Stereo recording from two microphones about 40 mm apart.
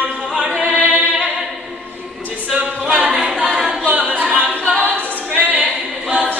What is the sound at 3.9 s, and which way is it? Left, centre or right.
A capella, right.